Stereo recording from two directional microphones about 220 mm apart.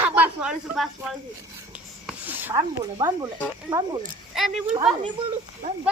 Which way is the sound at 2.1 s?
10° right (ahead or behind).